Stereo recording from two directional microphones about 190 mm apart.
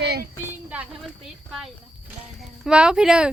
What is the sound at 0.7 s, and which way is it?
Speech, 5° right (ahead or behind).